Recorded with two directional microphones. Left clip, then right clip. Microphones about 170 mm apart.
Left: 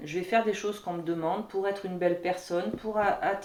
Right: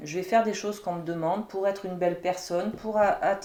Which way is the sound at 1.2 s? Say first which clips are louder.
Right 4 dB; 40° right (ahead or behind).